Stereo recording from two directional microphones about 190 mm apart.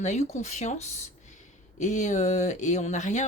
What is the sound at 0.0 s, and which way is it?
Speech, 35° left (ahead or behind).